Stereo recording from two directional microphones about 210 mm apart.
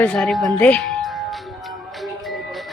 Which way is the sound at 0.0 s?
5° left (ahead or behind).